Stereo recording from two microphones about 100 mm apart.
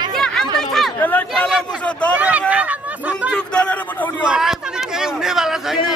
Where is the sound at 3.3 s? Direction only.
10° left (ahead or behind).